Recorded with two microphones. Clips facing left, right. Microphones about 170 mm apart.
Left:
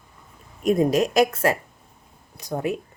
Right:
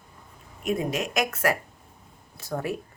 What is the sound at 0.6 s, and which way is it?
Speech, 40° left (ahead or behind).